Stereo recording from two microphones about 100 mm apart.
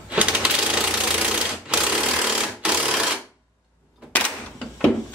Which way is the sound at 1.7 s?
10° right (ahead or behind).